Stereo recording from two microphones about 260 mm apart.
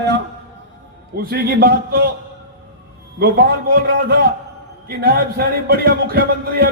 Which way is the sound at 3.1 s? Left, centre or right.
Right.